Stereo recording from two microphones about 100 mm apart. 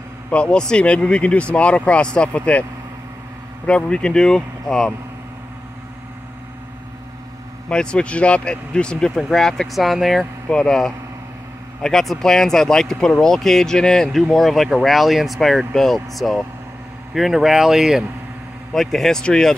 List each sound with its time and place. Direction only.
0.3 s speech: 10° left (ahead or behind)
3.6 s speech: 10° left (ahead or behind)
7.7 s speech: 10° left (ahead or behind)